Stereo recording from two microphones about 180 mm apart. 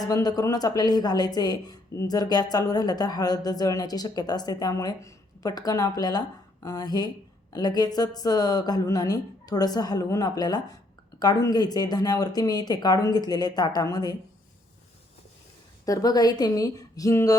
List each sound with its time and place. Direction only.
0.0 s speech: 20° left (ahead or behind)
15.9 s speech: 20° left (ahead or behind)